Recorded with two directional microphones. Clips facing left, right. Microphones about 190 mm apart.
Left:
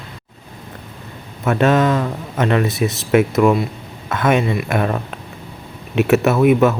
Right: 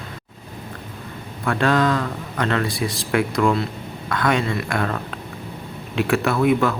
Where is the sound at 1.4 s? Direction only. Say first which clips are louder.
Left 4 dB; 20° left (ahead or behind).